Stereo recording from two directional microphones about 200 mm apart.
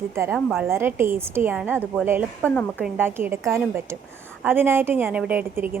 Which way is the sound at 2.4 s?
5° left (ahead or behind).